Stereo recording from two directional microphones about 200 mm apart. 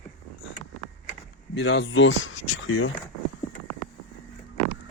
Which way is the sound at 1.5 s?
65° left (ahead or behind).